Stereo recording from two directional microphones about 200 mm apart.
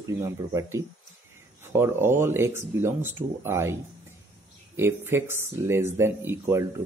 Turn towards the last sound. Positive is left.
turn(degrees=-10)  # may be behind; listen again after turning